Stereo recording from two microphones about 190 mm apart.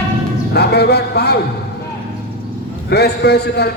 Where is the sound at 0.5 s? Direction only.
60° left (ahead or behind).